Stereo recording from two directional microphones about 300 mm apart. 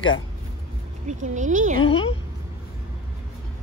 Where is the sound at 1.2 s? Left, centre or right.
Right.